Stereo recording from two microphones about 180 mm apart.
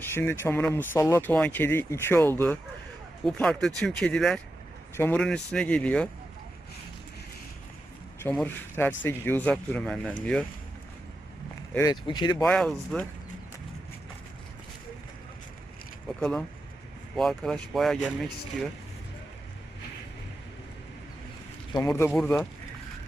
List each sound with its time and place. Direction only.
0.0 s speech: 15° left (ahead or behind)
8.4 s speech: 10° left (ahead or behind)
11.7 s speech: 15° left (ahead or behind)
12.5 s speech: 5° left (ahead or behind)
17.2 s speech: centre (ahead or behind)
21.7 s speech: 20° left (ahead or behind)